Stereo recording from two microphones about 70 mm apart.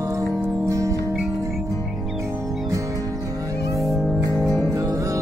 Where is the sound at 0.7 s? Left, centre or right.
Right.